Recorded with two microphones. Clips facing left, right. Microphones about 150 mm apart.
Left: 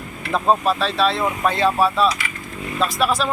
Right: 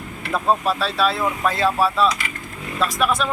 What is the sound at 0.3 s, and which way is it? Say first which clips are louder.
Speech: left 2 dB; 20° left (ahead or behind).